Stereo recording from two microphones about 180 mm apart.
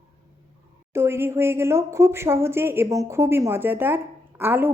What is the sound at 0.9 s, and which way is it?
A woman's voice, 15° right (ahead or behind).